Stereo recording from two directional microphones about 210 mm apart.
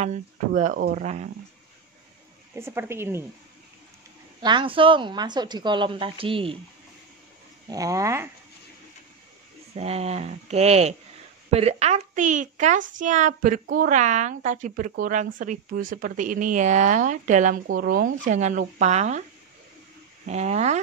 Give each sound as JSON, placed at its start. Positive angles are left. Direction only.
{"t": 0.0, "sound": "speech", "side_deg": -35}
{"t": 2.5, "sound": "speech", "side_deg": -10}
{"t": 4.4, "sound": "a woman's voice", "side_deg": -20}
{"t": 7.7, "sound": "speech", "side_deg": -15}
{"t": 9.8, "sound": "speech", "side_deg": -30}
{"t": 20.2, "sound": "speech", "side_deg": -30}